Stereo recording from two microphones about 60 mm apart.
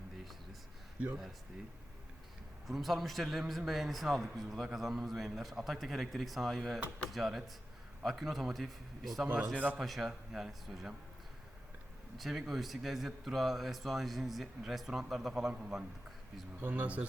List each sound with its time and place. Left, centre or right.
2.6 s a man's voice: centre
12.1 s a man's voice: centre
16.6 s speech: right